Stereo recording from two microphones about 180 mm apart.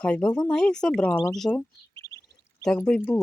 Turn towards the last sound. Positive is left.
turn(degrees=10)  # may be behind; listen again after turning